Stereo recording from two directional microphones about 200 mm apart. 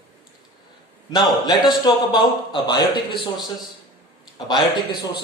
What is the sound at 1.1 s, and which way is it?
A man's voice, 20° left (ahead or behind).